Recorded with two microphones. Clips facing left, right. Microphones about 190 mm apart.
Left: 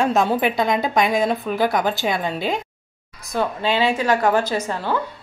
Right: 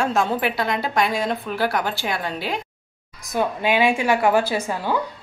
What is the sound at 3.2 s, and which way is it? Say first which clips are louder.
Speech: even; 15° right (ahead or behind).